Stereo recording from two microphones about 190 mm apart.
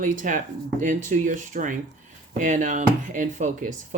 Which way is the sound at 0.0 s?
45° right (ahead or behind).